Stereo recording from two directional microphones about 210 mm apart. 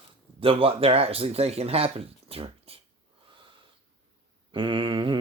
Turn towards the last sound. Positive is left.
turn(degrees=-25)  # may be behind; listen again after turning